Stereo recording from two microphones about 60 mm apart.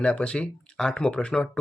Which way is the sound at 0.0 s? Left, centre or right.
Centre.